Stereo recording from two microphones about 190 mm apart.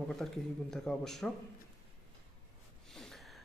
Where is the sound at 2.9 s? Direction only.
Centre (ahead or behind).